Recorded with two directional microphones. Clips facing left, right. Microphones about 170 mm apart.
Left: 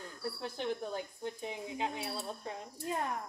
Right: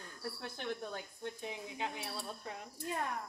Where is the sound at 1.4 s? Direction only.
25° left (ahead or behind).